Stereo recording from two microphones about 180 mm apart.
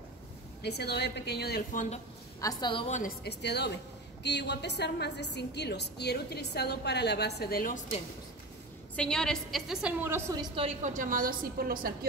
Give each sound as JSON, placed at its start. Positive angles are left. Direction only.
{"t": 0.6, "sound": "a woman's voice", "side_deg": 65}
{"t": 2.4, "sound": "a woman's voice", "side_deg": 25}
{"t": 3.3, "sound": "a woman's voice", "side_deg": 65}
{"t": 8.9, "sound": "a woman's voice", "side_deg": 5}
{"t": 10.5, "sound": "a woman's voice", "side_deg": -35}